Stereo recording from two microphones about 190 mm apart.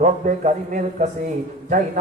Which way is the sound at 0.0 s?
40° right (ahead or behind).